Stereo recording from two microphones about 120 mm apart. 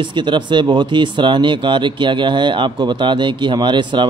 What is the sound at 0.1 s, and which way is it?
A man's voice, 40° right (ahead or behind).